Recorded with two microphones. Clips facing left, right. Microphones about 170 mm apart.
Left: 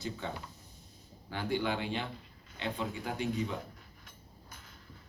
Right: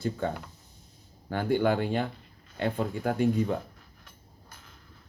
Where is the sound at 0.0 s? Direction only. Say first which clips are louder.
Right 8 dB; 50° right (ahead or behind).